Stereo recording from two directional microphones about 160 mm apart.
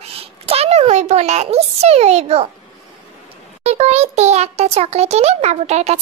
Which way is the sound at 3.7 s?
40° right (ahead or behind).